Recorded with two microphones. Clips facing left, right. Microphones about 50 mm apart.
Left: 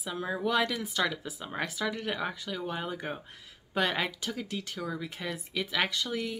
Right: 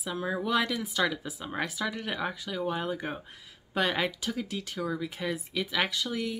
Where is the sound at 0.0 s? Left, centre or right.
Centre.